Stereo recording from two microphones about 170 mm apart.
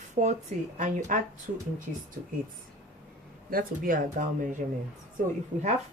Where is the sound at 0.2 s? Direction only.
40° right (ahead or behind).